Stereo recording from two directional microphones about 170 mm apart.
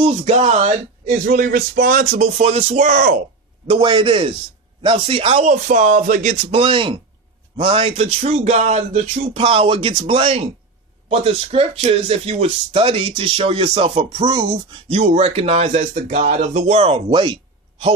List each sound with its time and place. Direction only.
0.0 s speech: 40° right (ahead or behind); by 3.2 s 55° right (ahead or behind)
3.6 s speech: 30° right (ahead or behind); by 6.3 s 50° right (ahead or behind)
6.5 s speech: 30° right (ahead or behind)
14.9 s speech: 40° right (ahead or behind)